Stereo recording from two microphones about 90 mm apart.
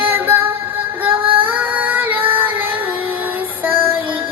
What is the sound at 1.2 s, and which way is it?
Female singing, 75° right (ahead or behind).